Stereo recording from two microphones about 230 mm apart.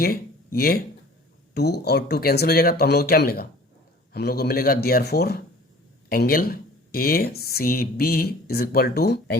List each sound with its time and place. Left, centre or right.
0.0 s speech: left